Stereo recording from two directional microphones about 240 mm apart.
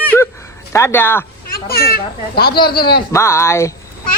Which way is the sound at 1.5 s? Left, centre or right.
Left.